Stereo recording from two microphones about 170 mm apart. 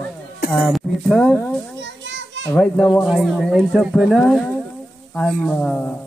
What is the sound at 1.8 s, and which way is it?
Children playing, 90° right.